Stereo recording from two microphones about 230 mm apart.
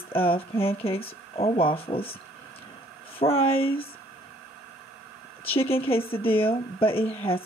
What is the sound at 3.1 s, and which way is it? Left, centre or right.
Speech, left.